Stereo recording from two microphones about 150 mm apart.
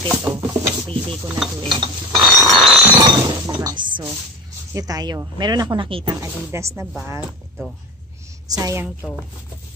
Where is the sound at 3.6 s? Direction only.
30° right (ahead or behind).